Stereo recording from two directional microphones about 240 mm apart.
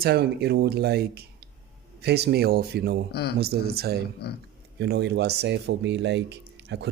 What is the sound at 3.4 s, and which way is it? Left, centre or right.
Speech, right.